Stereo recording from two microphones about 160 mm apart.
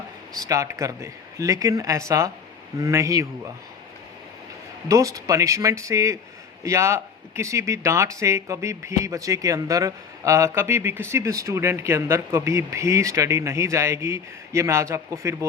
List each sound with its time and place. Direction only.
0.3 s speech: 20° right (ahead or behind)
4.9 s speech: 20° right (ahead or behind)